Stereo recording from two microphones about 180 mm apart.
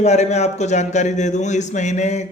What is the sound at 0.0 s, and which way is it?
A man's voice, 40° left (ahead or behind).